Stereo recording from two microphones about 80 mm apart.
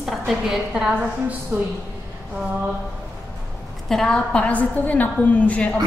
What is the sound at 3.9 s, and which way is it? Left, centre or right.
A woman's voice, centre.